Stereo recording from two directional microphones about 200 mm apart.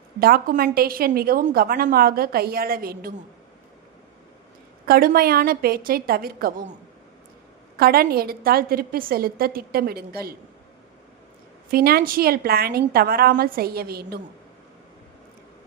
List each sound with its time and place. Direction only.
0.2 s a woman's voice: 45° right (ahead or behind)
4.9 s a woman's voice: 45° right (ahead or behind)
7.8 s a woman's voice: 50° right (ahead or behind)
11.7 s a woman's voice: 50° right (ahead or behind)